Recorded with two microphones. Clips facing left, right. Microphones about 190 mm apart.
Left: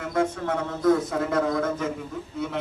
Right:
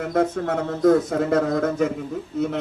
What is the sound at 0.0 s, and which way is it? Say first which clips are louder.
Speech: right 4 dB; 45° right (ahead or behind).